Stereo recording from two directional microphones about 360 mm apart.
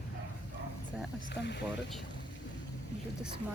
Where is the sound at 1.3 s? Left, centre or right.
Left.